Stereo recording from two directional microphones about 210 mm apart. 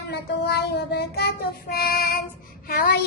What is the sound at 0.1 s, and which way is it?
A woman's voice, 55° left (ahead or behind).